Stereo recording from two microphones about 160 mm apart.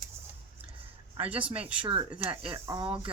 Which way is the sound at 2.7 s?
20° right (ahead or behind).